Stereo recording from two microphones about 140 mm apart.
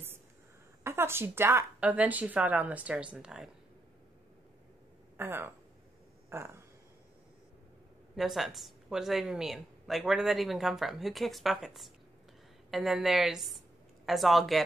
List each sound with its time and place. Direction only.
0.8 s speech: 15° right (ahead or behind)
5.1 s speech: 15° right (ahead or behind)
6.3 s a sound: 20° right (ahead or behind)
8.2 s speech: centre (ahead or behind)